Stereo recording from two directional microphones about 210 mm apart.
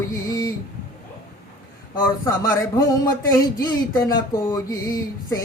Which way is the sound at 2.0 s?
15° left (ahead or behind).